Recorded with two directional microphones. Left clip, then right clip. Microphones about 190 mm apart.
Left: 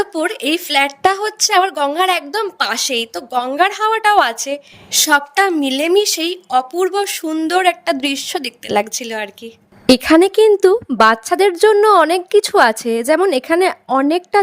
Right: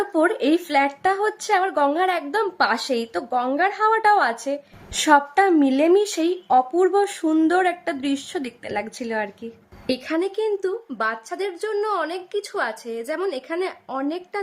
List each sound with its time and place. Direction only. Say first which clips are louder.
0.4 s a woman's voice: left 4 dB; 35° left (ahead or behind)
9.8 s a woman's voice: left 13 dB; 55° left (ahead or behind)